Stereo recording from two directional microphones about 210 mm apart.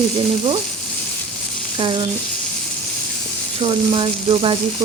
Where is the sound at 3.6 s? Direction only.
25° right (ahead or behind).